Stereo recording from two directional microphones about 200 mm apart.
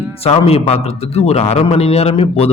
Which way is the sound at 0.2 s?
30° left (ahead or behind).